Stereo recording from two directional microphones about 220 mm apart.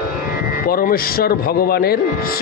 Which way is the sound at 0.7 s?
40° left (ahead or behind).